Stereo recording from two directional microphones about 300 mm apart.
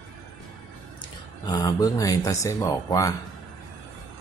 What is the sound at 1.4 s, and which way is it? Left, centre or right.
Speech, centre.